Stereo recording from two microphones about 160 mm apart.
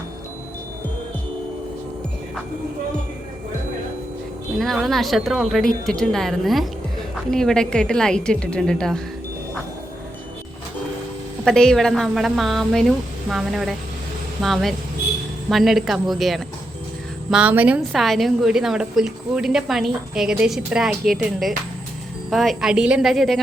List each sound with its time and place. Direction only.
4.6 s a woman's voice: centre (ahead or behind)
11.4 s a woman's voice: 5° left (ahead or behind)